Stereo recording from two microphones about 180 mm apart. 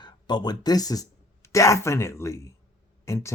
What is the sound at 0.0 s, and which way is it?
Speech, 25° left (ahead or behind).